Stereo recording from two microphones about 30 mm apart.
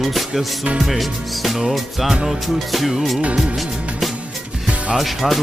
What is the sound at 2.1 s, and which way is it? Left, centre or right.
Music, centre.